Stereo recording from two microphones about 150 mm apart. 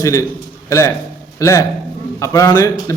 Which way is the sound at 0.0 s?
20° left (ahead or behind).